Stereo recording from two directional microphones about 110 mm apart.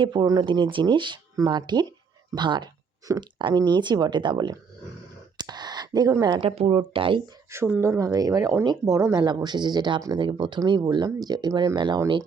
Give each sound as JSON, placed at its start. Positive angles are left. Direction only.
{"t": 0.0, "sound": "speech", "side_deg": -40}
{"t": 5.4, "sound": "a sound", "side_deg": -40}
{"t": 6.4, "sound": "speech", "side_deg": -65}
{"t": 7.5, "sound": "speech", "side_deg": -25}
{"t": 9.2, "sound": "speech", "side_deg": -40}